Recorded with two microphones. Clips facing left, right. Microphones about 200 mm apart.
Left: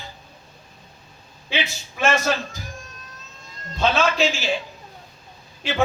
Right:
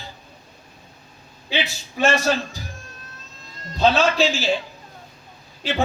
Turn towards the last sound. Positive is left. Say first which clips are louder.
# left 1 dB
turn(degrees=-35)  # may be behind; listen again after turning